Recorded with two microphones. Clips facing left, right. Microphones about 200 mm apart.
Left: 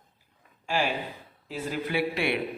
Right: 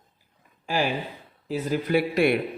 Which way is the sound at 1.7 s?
45° right (ahead or behind).